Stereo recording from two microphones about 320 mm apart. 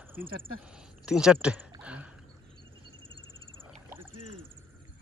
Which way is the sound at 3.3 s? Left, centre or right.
Centre.